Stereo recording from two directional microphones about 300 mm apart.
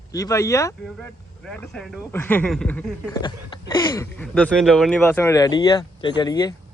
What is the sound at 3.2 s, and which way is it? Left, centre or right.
Speech, centre.